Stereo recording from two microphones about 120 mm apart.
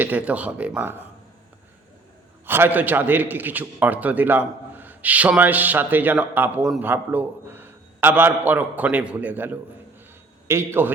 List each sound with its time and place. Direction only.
0.0 s a man's voice: 15° right (ahead or behind)
2.5 s a man's voice: 15° right (ahead or behind)